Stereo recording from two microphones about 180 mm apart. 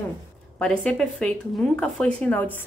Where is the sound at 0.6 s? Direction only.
5° left (ahead or behind).